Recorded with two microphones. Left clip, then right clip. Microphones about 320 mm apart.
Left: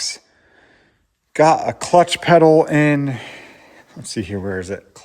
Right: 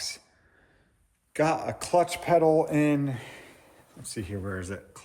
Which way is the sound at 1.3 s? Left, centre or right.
Centre.